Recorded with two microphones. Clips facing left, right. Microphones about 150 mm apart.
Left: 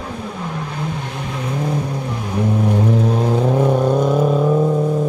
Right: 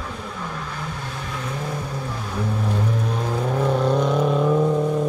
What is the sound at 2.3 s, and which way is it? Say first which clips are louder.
Vehicle: left 8 dB; 15° left (ahead or behind).